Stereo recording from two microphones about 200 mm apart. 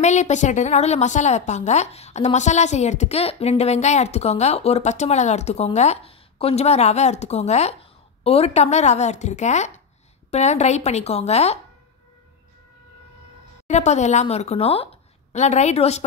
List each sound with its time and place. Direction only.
0.0 s a woman's voice: 35° left (ahead or behind)
13.7 s a woman's voice: 35° left (ahead or behind)